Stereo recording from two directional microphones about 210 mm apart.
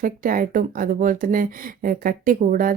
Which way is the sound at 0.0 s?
40° right (ahead or behind).